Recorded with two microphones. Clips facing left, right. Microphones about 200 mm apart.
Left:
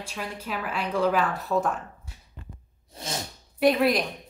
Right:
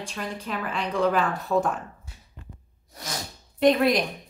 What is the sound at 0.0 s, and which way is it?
Speech, 5° left (ahead or behind).